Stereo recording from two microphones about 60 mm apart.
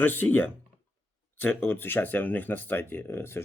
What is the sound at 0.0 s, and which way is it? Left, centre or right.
Speech, left.